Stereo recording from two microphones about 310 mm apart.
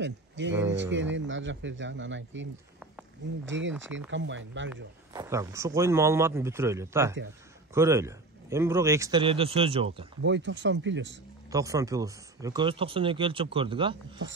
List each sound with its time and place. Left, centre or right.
0.0 s speech: right
3.4 s speech: right
5.1 s speech: centre
10.2 s speech: right
11.5 s speech: centre